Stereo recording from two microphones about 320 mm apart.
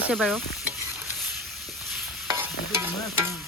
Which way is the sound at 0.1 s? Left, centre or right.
Centre.